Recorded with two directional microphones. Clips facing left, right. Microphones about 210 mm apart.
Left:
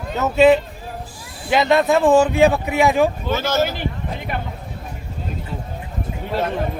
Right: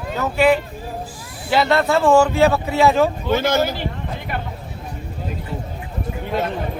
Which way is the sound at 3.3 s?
15° right (ahead or behind).